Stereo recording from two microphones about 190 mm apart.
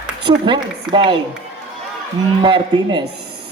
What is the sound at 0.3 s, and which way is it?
Speech, 25° right (ahead or behind).